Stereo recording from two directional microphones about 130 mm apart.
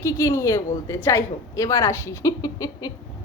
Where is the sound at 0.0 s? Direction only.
25° left (ahead or behind).